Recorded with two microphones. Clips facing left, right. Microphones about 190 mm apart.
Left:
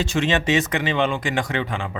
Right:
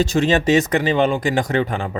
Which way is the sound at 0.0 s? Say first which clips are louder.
Right 5 dB; 40° right (ahead or behind).